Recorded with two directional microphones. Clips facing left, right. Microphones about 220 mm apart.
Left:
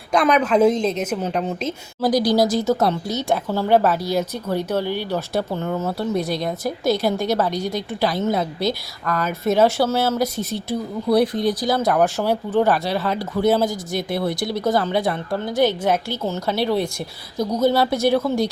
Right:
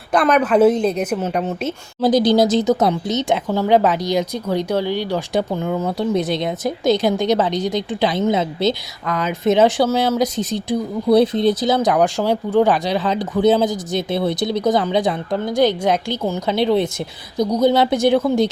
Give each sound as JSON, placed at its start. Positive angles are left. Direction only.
{"t": 0.1, "sound": "a woman's voice", "side_deg": -5}
{"t": 2.0, "sound": "a woman's voice", "side_deg": -20}
{"t": 4.0, "sound": "a woman's voice", "side_deg": 5}
{"t": 5.3, "sound": "a woman's voice", "side_deg": -15}